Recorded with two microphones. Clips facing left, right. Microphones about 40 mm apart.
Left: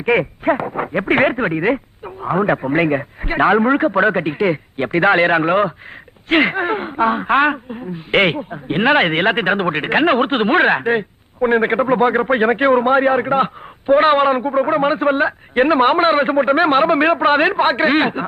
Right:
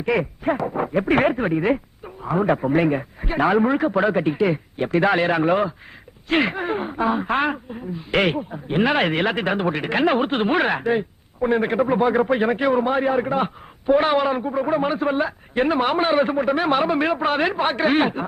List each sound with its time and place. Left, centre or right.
0.0 s speech: left